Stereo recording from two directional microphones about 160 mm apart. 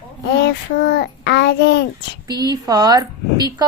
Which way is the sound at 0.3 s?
90° left.